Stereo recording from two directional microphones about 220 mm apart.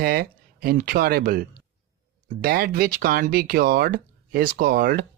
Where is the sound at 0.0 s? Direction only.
45° right (ahead or behind).